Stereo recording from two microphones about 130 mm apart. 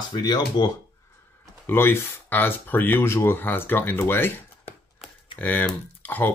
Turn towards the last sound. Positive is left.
turn(degrees=15)  # may be behind; listen again after turning